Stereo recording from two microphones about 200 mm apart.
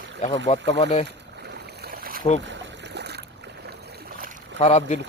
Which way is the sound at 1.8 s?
45° right (ahead or behind).